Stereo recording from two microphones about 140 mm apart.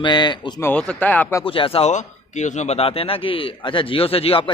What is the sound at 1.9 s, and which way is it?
A man's voice, 60° left (ahead or behind).